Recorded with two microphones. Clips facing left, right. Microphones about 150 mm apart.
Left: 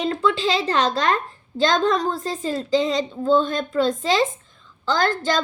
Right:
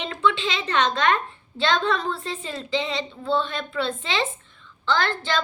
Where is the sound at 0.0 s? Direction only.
40° left (ahead or behind).